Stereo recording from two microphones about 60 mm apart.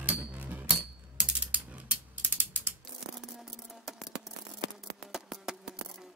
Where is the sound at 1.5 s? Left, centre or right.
Right.